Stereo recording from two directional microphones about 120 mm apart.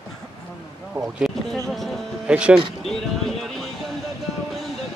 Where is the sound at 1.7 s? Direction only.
Centre (ahead or behind).